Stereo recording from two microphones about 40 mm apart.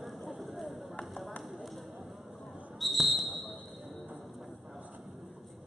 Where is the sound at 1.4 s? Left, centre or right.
Centre.